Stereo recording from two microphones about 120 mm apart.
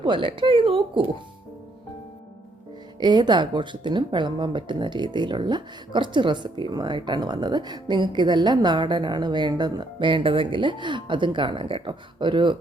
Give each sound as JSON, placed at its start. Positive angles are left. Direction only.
{"t": 0.0, "sound": "speech", "side_deg": -45}
{"t": 3.0, "sound": "speech", "side_deg": -40}